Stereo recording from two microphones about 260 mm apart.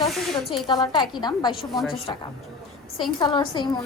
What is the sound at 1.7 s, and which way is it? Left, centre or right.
Speech, centre.